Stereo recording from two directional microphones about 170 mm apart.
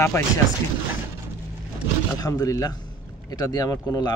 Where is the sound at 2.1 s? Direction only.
20° left (ahead or behind).